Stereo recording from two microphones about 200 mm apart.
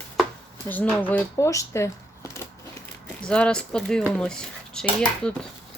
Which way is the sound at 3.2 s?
5° left (ahead or behind).